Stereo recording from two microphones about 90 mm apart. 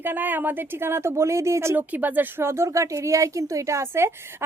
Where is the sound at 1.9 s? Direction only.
20° right (ahead or behind).